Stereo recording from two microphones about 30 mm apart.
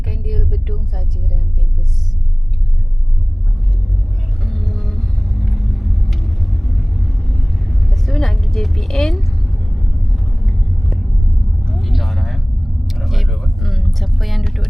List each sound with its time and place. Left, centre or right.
0.1 s a sound: centre
4.4 s vehicle: centre
8.9 s vehicle: centre
9.1 s vehicle: centre
10.4 s vehicle: centre
10.7 s vehicle: centre
12.9 s a sound: centre